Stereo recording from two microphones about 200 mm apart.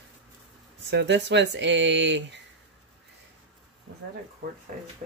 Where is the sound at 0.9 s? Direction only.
60° right (ahead or behind).